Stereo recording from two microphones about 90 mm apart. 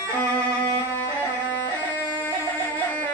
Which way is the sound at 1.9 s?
20° left (ahead or behind).